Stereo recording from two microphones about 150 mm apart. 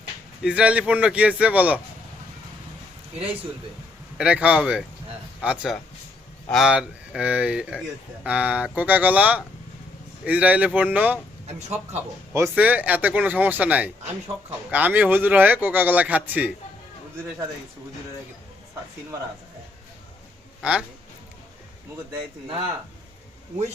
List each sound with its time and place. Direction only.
0.4 s speech: 5° right (ahead or behind)
4.2 s speech: 10° right (ahead or behind)
11.4 s speech: 45° right (ahead or behind)
11.9 s speech: 15° right (ahead or behind)
20.6 s speech: 5° right (ahead or behind)